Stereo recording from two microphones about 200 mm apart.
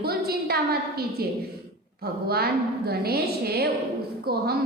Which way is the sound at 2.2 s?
50° right (ahead or behind).